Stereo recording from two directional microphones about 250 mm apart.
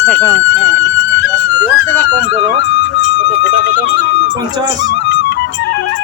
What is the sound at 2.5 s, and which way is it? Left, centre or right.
Speech, left.